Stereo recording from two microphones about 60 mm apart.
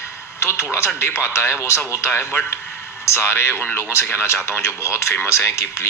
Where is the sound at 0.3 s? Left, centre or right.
Left.